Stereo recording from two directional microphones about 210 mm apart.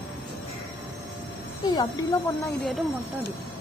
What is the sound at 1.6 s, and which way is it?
Speech, 15° left (ahead or behind).